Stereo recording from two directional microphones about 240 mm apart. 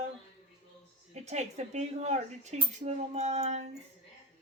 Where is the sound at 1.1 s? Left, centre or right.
Right.